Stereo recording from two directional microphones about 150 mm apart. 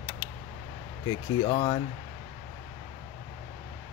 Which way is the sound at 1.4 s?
35° left (ahead or behind).